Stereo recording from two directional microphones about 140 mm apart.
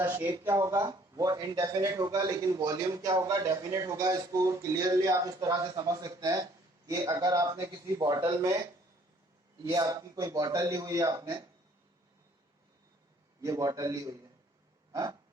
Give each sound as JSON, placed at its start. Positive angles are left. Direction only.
{"t": 0.0, "sound": "speech", "side_deg": -15}
{"t": 9.6, "sound": "speech", "side_deg": -25}
{"t": 13.4, "sound": "speech", "side_deg": -25}